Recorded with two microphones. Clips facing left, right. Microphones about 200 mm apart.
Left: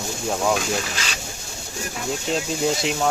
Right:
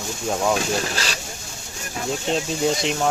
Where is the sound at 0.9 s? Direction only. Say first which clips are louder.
Right 3 dB; 40° right (ahead or behind).